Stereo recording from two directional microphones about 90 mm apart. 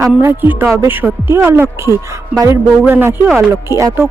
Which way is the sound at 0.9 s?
25° right (ahead or behind).